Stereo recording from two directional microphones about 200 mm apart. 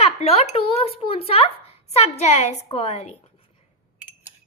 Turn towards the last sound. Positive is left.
turn(degrees=30)  # may be behind; listen again after turning